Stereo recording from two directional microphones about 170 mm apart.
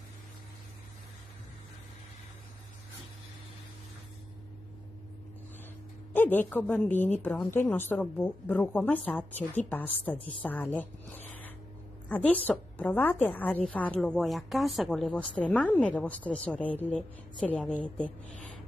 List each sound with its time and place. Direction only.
6.1 s a woman's voice: 10° left (ahead or behind)
12.1 s a woman's voice: 10° left (ahead or behind)